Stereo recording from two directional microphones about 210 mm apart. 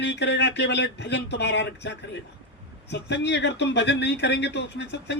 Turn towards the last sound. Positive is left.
turn(degrees=55)  # may be behind; listen again after turning